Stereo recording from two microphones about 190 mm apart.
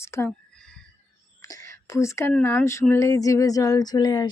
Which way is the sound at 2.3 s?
10° left (ahead or behind).